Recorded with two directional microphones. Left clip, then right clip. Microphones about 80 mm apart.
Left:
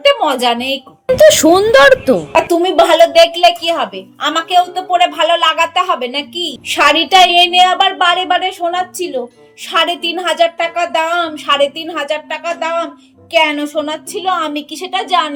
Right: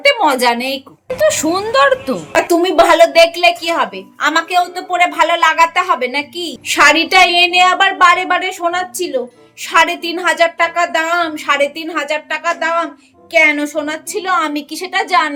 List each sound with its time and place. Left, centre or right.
0.0 s a woman's voice: right
1.6 s speech: left
2.3 s a woman's voice: right
9.8 s a woman's voice: right
10.2 s a woman's voice: right
11.5 s a woman's voice: right
13.3 s a woman's voice: right
14.2 s a woman's voice: right